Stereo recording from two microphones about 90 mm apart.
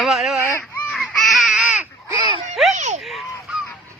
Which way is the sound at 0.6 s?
20° left (ahead or behind).